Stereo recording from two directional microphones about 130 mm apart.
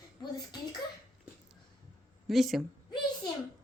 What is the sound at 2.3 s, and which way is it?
Speech, centre (ahead or behind).